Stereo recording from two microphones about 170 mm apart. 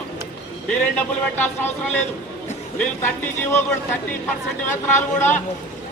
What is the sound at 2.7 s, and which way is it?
Speech, 10° left (ahead or behind).